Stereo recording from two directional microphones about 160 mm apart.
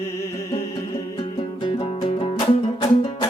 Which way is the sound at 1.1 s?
30° left (ahead or behind).